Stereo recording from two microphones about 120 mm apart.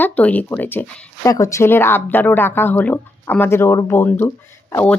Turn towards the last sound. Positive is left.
turn(degrees=20)  # may be behind; listen again after turning